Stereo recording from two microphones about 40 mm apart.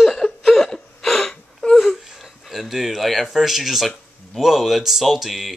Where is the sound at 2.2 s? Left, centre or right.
Centre.